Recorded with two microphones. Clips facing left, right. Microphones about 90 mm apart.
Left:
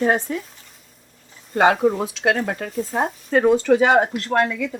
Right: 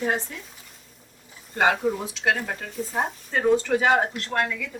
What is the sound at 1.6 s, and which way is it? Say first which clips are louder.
Speech: left 6 dB; 70° left (ahead or behind).